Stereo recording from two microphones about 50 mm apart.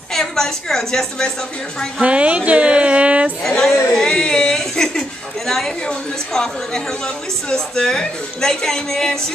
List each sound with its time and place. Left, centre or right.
0.1 s a woman's voice: centre
2.0 s speech: right
3.4 s a woman's voice: centre
3.9 s whimper: centre
5.5 s a woman's voice: centre